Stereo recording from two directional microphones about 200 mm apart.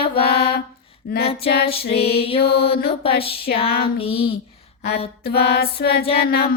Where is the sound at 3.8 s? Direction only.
30° left (ahead or behind).